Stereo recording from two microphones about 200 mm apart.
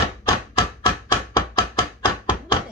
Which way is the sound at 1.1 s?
20° left (ahead or behind).